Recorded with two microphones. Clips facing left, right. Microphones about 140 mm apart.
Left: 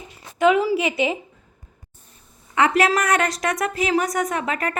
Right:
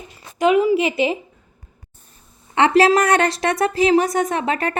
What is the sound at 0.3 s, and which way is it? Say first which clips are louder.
Speech: right 2 dB; 20° right (ahead or behind).